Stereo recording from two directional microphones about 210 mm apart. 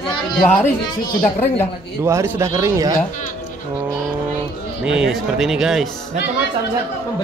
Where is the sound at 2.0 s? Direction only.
15° right (ahead or behind).